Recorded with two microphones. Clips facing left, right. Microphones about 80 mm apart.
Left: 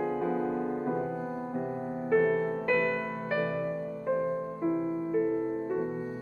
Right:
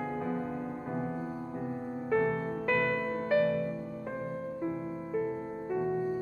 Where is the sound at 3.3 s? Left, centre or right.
Centre.